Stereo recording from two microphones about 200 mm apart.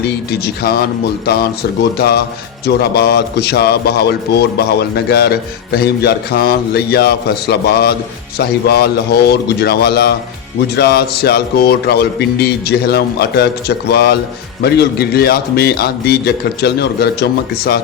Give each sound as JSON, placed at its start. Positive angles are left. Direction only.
{"t": 0.3, "sound": "a man's voice", "side_deg": 50}